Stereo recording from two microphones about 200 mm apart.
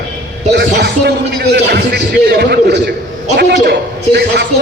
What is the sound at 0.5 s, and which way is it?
Speech, 55° right (ahead or behind).